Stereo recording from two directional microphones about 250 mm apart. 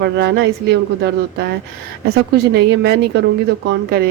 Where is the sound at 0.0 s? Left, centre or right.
Right.